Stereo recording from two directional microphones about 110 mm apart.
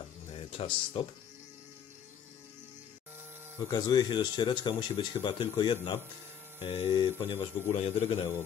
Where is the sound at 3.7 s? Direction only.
40° left (ahead or behind).